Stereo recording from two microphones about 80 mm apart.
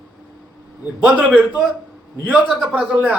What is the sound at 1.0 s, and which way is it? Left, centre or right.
Speech, centre.